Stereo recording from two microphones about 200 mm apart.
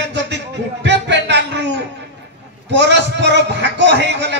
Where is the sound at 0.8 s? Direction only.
60° right (ahead or behind).